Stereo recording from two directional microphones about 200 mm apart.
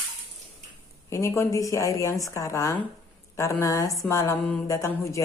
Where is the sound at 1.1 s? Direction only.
15° left (ahead or behind).